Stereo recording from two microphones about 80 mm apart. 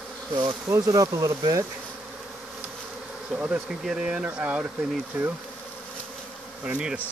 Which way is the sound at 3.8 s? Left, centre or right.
Centre.